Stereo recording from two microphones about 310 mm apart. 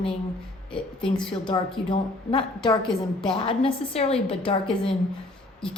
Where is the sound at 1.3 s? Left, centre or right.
Centre.